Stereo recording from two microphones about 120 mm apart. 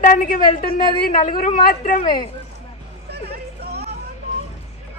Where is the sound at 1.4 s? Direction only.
85° left.